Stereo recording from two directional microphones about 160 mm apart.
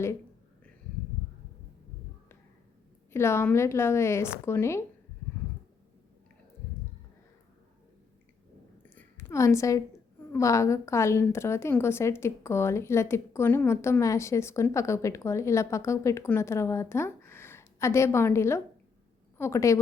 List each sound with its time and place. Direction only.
3.1 s a woman's voice: 15° left (ahead or behind)
8.8 s a sound: 15° left (ahead or behind)
10.3 s a woman's voice: 20° left (ahead or behind)